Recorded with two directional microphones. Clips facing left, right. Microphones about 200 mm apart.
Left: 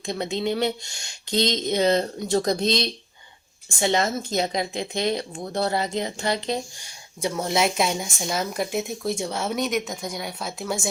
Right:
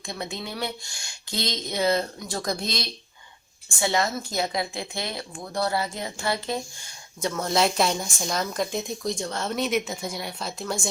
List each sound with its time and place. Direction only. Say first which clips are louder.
0.0 s speech: left 8 dB; 20° left (ahead or behind)
7.6 s speech: right 1 dB; 5° left (ahead or behind)